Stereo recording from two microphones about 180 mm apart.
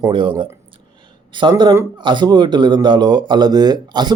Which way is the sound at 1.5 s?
15° right (ahead or behind).